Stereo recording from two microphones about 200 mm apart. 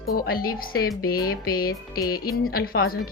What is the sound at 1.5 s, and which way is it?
A woman's voice, 50° left (ahead or behind).